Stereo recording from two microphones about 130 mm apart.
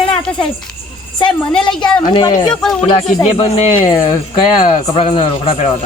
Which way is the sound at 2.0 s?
35° left (ahead or behind).